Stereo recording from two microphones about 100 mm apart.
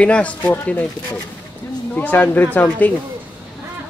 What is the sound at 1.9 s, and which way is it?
Speech, 15° left (ahead or behind).